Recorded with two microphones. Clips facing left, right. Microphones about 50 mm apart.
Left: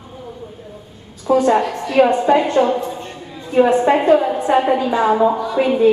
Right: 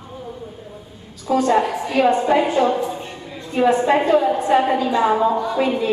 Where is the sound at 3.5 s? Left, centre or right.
Left.